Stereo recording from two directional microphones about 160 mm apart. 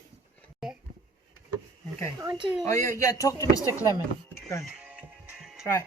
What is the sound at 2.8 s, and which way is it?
Speech, 20° left (ahead or behind).